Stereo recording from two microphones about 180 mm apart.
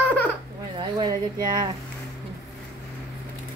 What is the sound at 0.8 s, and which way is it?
Speech, 25° right (ahead or behind).